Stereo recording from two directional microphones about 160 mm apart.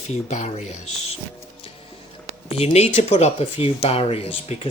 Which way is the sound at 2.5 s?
40° left (ahead or behind).